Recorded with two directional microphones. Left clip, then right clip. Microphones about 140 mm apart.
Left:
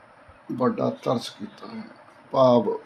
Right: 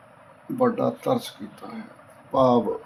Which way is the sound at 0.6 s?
40° left (ahead or behind).